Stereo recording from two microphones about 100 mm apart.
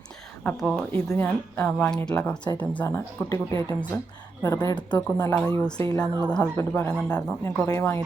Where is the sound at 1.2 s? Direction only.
20° left (ahead or behind).